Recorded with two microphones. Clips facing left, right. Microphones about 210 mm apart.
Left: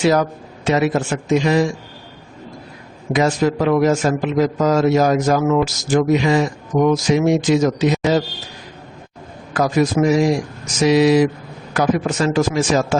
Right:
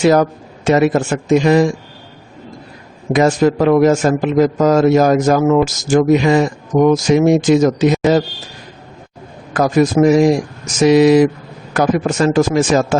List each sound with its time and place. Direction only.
0.0 s speech: 50° right (ahead or behind)
3.1 s speech: 50° right (ahead or behind)
9.5 s speech: 50° right (ahead or behind)